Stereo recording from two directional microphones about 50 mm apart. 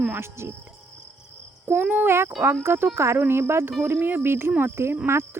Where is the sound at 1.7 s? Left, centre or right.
Right.